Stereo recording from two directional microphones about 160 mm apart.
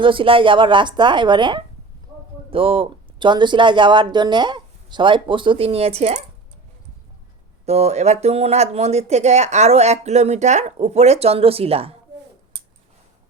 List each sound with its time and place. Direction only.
0.0 s speech: 35° right (ahead or behind)
7.6 s speech: 45° right (ahead or behind)